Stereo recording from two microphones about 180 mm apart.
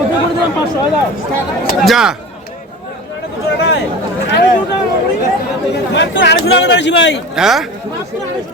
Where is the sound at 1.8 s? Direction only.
Centre (ahead or behind).